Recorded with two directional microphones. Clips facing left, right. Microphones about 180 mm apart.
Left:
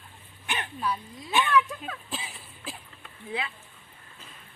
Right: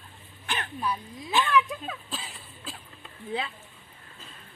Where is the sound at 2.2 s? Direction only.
Centre (ahead or behind).